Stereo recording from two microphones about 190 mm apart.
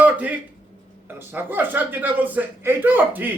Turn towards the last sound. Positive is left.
turn(degrees=-10)  # may be behind; listen again after turning